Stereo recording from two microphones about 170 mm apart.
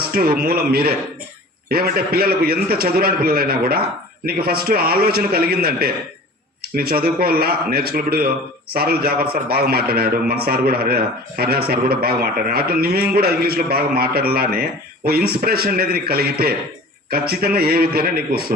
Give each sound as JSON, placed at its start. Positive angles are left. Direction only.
{"t": 0.0, "sound": "a man's voice", "side_deg": -65}